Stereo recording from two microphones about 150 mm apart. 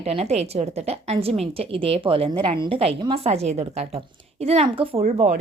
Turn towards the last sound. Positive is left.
turn(degrees=-45)  # may be behind; listen again after turning